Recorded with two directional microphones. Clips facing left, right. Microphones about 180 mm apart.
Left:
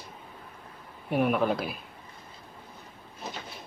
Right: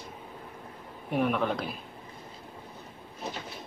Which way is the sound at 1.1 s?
5° left (ahead or behind).